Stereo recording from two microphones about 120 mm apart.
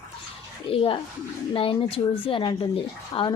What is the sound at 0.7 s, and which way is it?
A woman's voice, 50° left (ahead or behind).